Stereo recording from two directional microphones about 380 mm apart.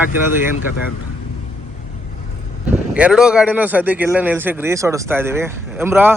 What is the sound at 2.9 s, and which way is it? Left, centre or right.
A man's voice, centre.